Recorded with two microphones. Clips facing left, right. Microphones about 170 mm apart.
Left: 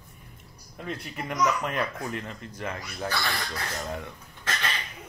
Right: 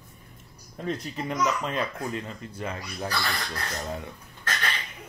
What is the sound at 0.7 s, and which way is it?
Speech, 30° right (ahead or behind).